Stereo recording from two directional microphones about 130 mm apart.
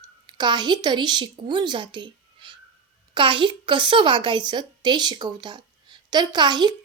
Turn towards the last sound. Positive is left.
turn(degrees=-35)  # may be behind; listen again after turning